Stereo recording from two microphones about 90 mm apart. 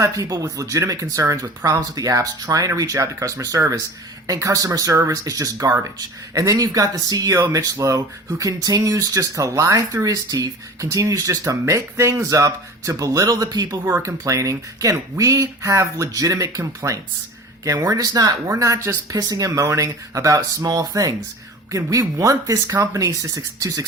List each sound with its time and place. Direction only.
0.0 s speech: 40° right (ahead or behind)